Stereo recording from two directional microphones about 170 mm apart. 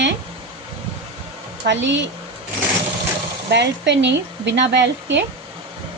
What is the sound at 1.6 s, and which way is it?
Speech, 90° right.